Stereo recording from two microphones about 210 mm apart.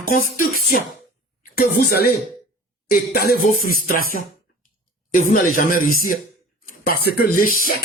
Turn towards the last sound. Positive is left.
turn(degrees=45)  # may be behind; listen again after turning